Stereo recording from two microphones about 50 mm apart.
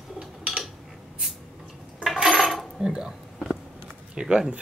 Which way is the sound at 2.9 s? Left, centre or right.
Centre.